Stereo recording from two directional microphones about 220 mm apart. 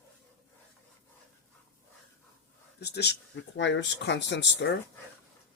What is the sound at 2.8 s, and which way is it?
Speech, 50° left (ahead or behind).